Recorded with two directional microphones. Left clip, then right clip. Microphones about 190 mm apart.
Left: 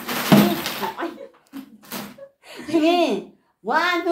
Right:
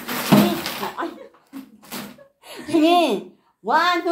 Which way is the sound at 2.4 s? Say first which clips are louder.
Right 2 dB; 30° right (ahead or behind).